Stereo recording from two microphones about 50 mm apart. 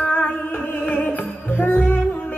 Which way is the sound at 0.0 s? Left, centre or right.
Left.